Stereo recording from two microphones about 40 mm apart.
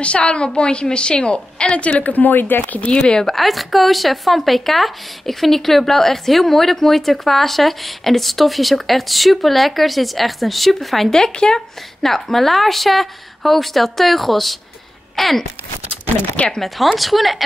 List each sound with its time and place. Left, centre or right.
0.0 s a woman's voice: left
2.1 s speech: left
3.3 s speech: centre
16.6 s speech: centre